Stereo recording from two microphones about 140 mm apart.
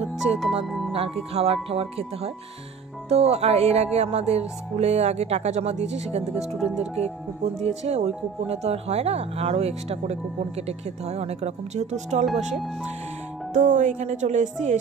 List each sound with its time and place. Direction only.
0.2 s music: 45° right (ahead or behind)
0.7 s speech: centre (ahead or behind)
0.9 s music: 45° right (ahead or behind)
13.6 s speech: 60° right (ahead or behind)